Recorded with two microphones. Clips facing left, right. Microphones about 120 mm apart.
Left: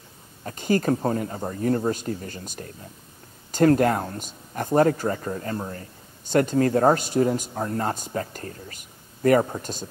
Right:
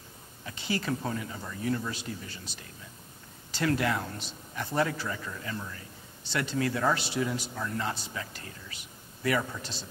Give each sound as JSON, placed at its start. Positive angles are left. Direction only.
{"t": 0.4, "sound": "speech", "side_deg": 45}